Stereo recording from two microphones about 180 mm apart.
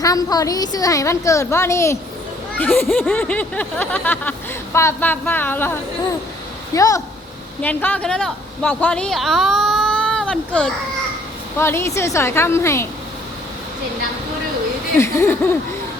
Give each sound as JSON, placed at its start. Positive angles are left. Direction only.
{"t": 0.0, "sound": "a woman's voice", "side_deg": 20}
{"t": 6.7, "sound": "a woman's voice", "side_deg": 20}
{"t": 14.9, "sound": "speech", "side_deg": 15}